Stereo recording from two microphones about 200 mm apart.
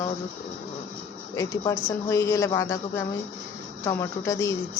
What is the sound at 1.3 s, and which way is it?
Speech, 15° left (ahead or behind).